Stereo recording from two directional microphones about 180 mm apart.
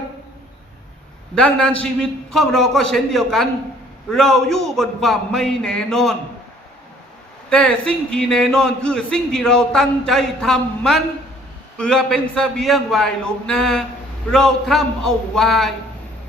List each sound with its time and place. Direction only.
1.4 s a man's voice: 5° left (ahead or behind)
7.5 s a man's voice: 5° left (ahead or behind)